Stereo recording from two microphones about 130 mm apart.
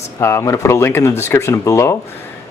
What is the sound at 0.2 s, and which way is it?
Speech, 20° left (ahead or behind).